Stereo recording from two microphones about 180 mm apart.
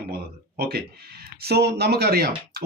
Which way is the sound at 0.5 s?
60° right (ahead or behind).